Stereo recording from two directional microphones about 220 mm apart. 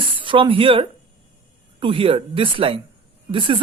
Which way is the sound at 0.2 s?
25° right (ahead or behind).